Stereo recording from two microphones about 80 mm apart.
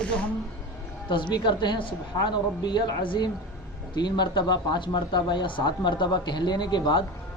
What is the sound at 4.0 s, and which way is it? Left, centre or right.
Speech, left.